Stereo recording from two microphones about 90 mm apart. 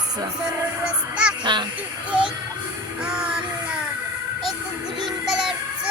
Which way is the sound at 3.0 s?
10° right (ahead or behind).